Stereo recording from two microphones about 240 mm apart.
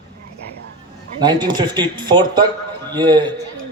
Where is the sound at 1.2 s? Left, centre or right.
Centre.